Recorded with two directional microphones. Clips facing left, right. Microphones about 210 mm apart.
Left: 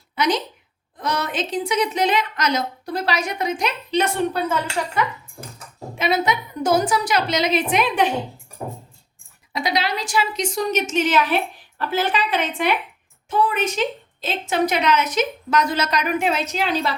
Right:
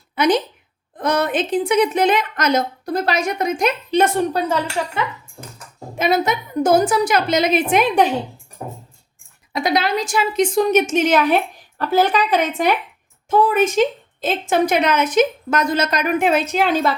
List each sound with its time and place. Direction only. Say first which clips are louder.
0.2 s a woman's voice: right 5 dB; 55° right (ahead or behind); by 4.5 s 40° right (ahead or behind)
6.0 s a woman's voice: right 3 dB; 45° right (ahead or behind)
9.5 s a woman's voice: right 4 dB; 50° right (ahead or behind)